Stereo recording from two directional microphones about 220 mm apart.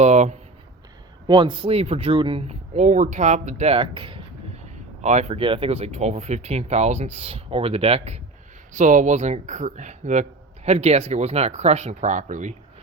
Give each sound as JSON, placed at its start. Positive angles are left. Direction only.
{"t": 0.0, "sound": "a man's voice", "side_deg": -30}